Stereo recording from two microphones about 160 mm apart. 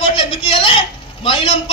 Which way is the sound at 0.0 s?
35° left (ahead or behind).